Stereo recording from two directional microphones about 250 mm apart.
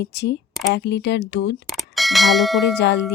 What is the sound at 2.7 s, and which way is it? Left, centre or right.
Speech, left.